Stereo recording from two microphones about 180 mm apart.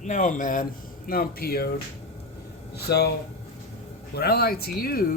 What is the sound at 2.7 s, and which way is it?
Speech, 60° left (ahead or behind).